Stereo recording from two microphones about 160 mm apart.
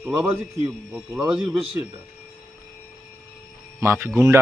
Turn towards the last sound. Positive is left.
turn(degrees=-20)  # may be behind; listen again after turning